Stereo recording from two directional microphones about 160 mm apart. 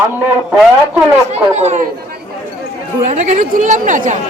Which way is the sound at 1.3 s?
45° right (ahead or behind).